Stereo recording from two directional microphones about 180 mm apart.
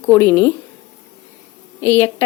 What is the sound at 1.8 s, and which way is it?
Speech, 15° left (ahead or behind).